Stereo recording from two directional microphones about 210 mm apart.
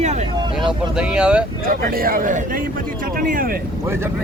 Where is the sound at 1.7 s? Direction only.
45° right (ahead or behind).